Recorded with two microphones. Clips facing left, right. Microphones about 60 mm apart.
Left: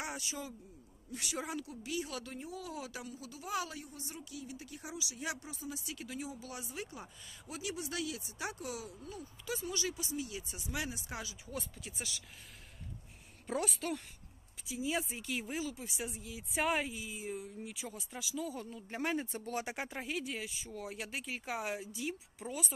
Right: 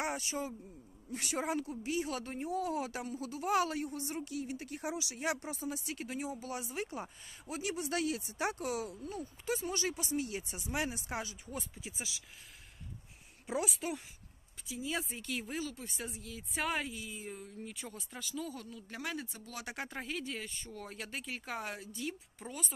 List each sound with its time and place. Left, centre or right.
0.0 s a man's voice: right
11.7 s a woman's voice: centre
13.5 s a woman's voice: centre
14.7 s speech: centre
18.5 s speech: left
19.6 s speech: centre
19.9 s speech: centre